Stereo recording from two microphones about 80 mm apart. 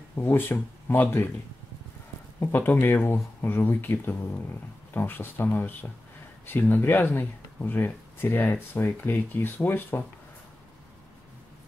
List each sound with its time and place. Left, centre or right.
0.1 s speech: left
2.4 s speech: left